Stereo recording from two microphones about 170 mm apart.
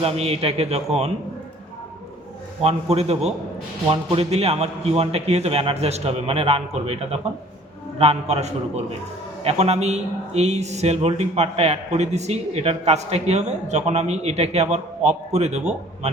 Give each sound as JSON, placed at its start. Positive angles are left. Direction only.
{"t": 0.0, "sound": "a man's voice", "side_deg": -35}
{"t": 2.6, "sound": "a man's voice", "side_deg": -40}